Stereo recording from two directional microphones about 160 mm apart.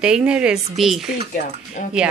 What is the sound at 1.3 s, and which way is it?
Speech, 55° left (ahead or behind).